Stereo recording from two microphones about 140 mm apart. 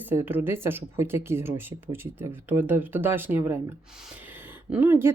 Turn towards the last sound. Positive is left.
turn(degrees=-15)  # may be behind; listen again after turning